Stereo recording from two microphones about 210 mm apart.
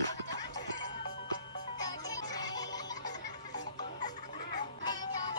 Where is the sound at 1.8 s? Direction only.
20° left (ahead or behind).